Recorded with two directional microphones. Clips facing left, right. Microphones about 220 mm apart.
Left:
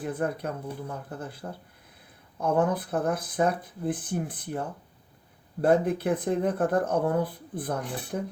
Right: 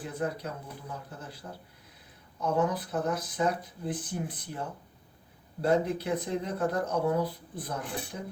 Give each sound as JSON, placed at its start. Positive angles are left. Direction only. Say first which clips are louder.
{"t": 0.0, "sound": "speech", "louder": "left 4 dB", "side_deg": 55}
{"t": 5.6, "sound": "speech", "louder": "left 4 dB", "side_deg": 55}